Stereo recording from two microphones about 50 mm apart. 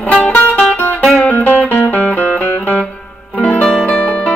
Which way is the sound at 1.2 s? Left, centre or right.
Left.